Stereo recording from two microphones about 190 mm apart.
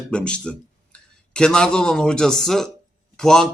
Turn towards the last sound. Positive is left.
turn(degrees=5)  # may be behind; listen again after turning